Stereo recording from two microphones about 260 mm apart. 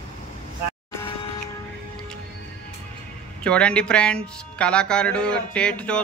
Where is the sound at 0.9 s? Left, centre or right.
Centre.